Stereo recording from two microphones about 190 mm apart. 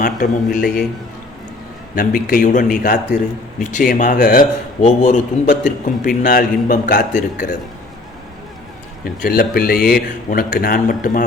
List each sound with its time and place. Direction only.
0.0 s a man's voice: 45° left (ahead or behind)
2.0 s a man's voice: 50° left (ahead or behind)
4.8 s a man's voice: 40° left (ahead or behind)
9.0 s a man's voice: 55° left (ahead or behind)